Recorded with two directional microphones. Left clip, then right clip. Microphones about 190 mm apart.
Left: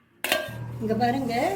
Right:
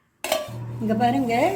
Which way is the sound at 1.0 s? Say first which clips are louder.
Right 5 dB; 40° right (ahead or behind).